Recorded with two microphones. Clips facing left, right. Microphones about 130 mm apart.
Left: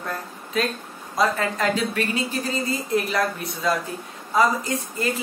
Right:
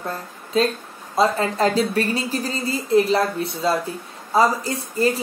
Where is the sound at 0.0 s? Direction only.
30° right (ahead or behind).